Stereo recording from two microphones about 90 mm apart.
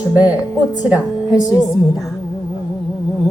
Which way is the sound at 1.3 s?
45° left (ahead or behind).